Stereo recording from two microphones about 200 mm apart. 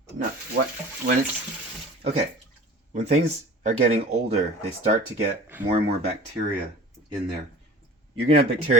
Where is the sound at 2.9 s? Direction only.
35° right (ahead or behind).